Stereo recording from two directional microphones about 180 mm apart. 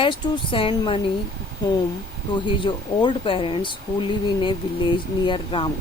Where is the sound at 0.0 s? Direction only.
30° left (ahead or behind).